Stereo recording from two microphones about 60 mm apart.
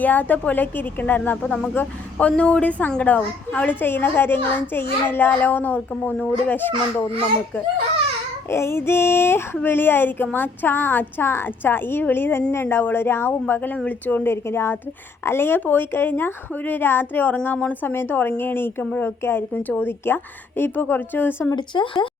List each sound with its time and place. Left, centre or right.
0.0 s a woman's voice: left
8.4 s music: left
9.6 s a child's voice: left
21.7 s speech: left